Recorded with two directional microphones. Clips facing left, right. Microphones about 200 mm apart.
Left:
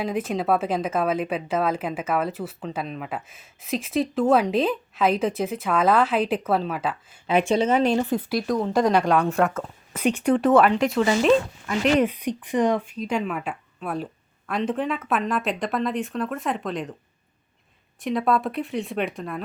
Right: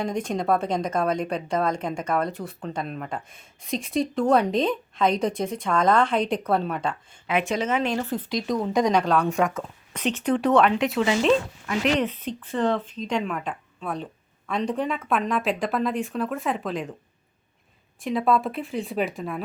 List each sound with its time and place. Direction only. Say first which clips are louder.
0.0 s a woman's voice: left 1 dB; 5° left (ahead or behind)
7.3 s speech: left 4 dB; 30° left (ahead or behind)
7.9 s a woman's voice: left 4 dB; 15° left (ahead or behind)
18.0 s a woman's voice: even; centre (ahead or behind)